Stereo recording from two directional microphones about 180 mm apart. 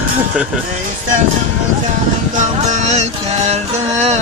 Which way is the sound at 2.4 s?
40° right (ahead or behind).